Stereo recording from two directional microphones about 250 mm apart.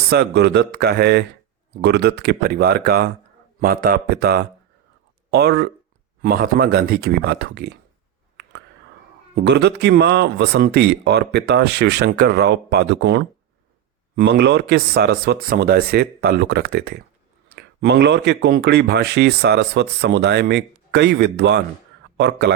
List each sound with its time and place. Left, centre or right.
0.1 s speech: right
9.3 s speech: right